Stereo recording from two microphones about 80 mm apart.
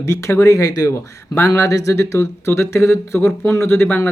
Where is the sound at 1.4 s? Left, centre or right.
Left.